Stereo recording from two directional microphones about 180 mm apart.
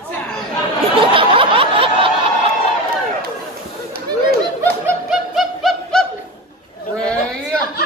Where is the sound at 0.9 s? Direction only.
30° right (ahead or behind).